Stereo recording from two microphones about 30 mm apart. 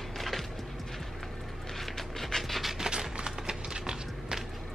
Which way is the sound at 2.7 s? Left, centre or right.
Right.